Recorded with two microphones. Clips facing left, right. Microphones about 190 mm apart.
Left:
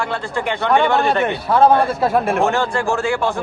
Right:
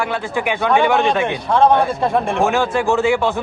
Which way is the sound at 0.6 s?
Centre (ahead or behind).